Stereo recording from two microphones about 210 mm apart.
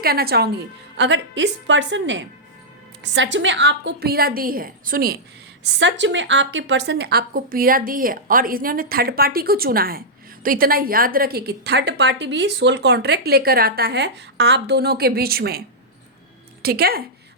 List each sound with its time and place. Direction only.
0.0 s a woman's voice: 45° right (ahead or behind)
5.8 s a woman's voice: 60° right (ahead or behind)
16.6 s a woman's voice: 45° right (ahead or behind)